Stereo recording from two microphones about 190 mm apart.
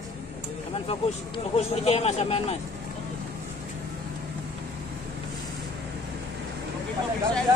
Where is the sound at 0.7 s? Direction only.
30° left (ahead or behind).